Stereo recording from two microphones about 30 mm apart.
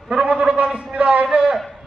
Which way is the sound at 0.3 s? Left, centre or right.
Right.